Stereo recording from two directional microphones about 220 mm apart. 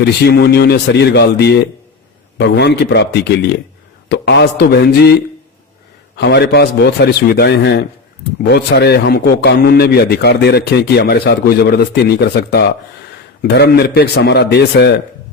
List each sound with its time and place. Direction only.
0.0 s a man's voice: 45° left (ahead or behind)
6.1 s a man's voice: 50° left (ahead or behind)